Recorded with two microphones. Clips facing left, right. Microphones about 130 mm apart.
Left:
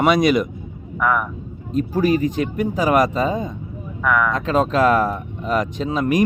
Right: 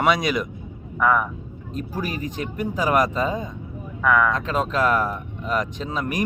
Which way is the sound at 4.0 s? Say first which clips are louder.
Even; 5° left (ahead or behind).